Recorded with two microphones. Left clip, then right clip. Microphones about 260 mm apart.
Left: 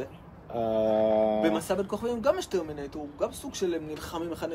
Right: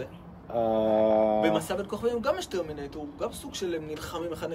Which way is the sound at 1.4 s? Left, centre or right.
Centre.